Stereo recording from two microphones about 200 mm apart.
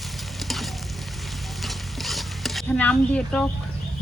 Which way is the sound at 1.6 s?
Centre (ahead or behind).